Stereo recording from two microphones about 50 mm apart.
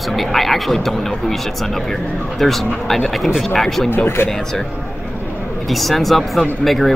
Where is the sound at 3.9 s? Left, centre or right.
Left.